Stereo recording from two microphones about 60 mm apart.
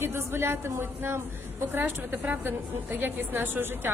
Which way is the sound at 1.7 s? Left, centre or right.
Right.